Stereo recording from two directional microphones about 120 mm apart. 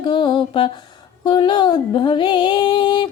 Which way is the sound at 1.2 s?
40° left (ahead or behind).